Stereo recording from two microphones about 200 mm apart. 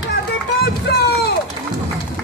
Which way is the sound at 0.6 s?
55° left (ahead or behind).